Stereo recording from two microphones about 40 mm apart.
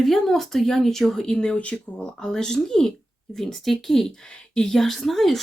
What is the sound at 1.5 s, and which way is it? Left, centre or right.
Speech, left.